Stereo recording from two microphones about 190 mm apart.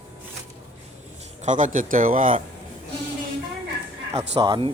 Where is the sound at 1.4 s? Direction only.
40° right (ahead or behind).